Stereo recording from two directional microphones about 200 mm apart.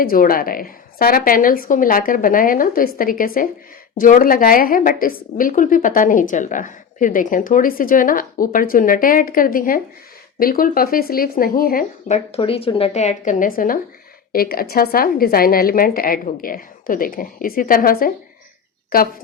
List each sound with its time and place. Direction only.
0.0 s a woman's voice: 45° left (ahead or behind)